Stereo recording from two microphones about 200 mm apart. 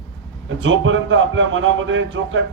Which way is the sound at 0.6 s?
70° right (ahead or behind).